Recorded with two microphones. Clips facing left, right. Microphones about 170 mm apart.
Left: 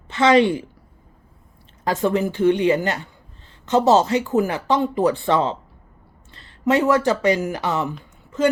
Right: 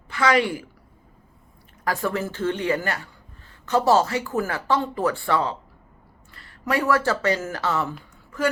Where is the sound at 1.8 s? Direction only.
20° left (ahead or behind).